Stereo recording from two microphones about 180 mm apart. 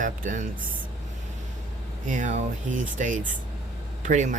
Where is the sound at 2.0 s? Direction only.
45° right (ahead or behind).